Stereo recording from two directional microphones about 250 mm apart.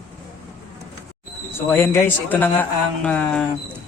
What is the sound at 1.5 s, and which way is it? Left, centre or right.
Speech, centre.